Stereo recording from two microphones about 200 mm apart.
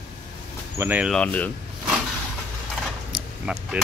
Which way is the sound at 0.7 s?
10° right (ahead or behind).